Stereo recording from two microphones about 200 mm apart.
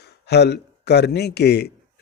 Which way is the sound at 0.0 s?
55° left (ahead or behind).